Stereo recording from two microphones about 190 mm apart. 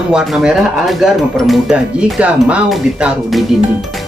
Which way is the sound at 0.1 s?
5° right (ahead or behind).